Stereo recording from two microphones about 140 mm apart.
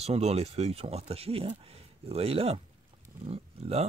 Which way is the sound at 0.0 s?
50° right (ahead or behind).